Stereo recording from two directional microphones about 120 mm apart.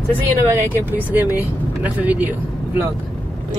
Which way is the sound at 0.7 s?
15° right (ahead or behind).